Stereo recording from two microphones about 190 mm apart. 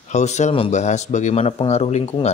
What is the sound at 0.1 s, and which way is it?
Speech, 35° left (ahead or behind).